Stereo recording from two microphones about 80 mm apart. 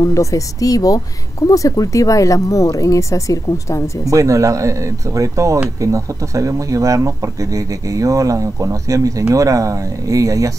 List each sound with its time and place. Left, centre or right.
0.0 s speech: left
4.1 s speech: right